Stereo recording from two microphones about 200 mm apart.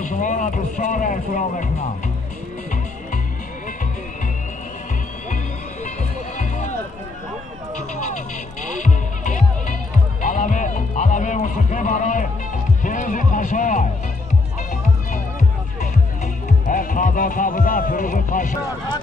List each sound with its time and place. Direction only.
0.0 s speech: 40° left (ahead or behind)
5.9 s music: 35° left (ahead or behind)
8.7 s music: 40° left (ahead or behind)
12.8 s run: 40° left (ahead or behind)
14.7 s music: 40° left (ahead or behind)
16.4 s speech: 40° left (ahead or behind)